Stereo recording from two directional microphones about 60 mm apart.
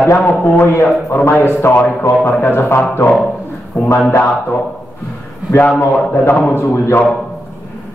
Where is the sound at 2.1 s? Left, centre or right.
Left.